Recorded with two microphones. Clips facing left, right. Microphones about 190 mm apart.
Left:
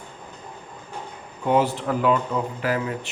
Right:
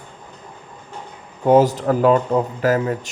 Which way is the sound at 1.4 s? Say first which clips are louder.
Right 7 dB; 40° right (ahead or behind).